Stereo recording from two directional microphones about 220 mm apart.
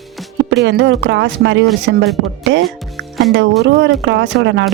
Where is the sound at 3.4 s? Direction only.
55° right (ahead or behind).